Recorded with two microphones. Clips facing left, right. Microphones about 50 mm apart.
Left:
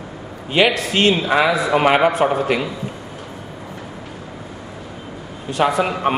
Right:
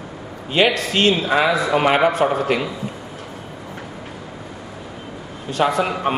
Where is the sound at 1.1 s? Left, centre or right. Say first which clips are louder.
Left 1 dB; centre.